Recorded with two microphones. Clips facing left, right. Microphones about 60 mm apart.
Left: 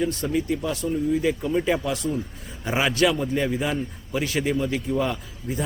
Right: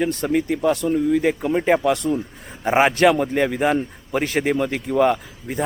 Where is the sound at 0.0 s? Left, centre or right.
Right.